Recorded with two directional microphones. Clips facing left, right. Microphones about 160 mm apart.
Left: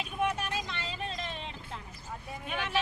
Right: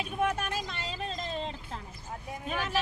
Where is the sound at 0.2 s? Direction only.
45° right (ahead or behind).